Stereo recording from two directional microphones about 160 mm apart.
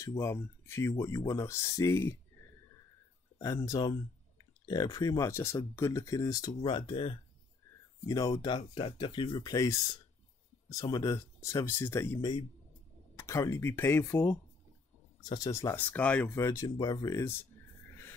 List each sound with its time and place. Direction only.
0.0 s speech: 20° left (ahead or behind)
3.3 s speech: 20° left (ahead or behind)
8.3 s speech: 30° left (ahead or behind); by 14.4 s 15° left (ahead or behind)
15.2 s speech: 25° left (ahead or behind)